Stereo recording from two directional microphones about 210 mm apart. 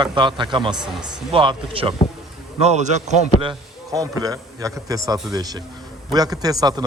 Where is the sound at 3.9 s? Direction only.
15° right (ahead or behind).